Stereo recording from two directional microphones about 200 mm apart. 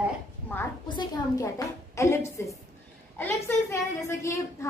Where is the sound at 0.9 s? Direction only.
20° left (ahead or behind).